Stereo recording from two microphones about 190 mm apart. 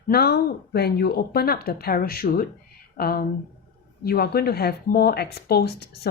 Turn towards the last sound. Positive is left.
turn(degrees=55)  # may be behind; listen again after turning